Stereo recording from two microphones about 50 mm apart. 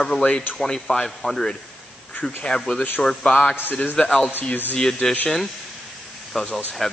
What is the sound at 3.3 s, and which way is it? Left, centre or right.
Speech, left.